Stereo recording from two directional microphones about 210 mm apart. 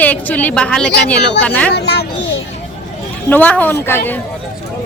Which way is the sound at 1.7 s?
55° left (ahead or behind).